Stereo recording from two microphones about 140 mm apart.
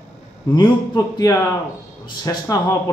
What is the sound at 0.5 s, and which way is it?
Speech, 30° left (ahead or behind).